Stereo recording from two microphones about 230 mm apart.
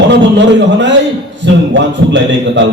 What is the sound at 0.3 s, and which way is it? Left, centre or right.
Speech, right.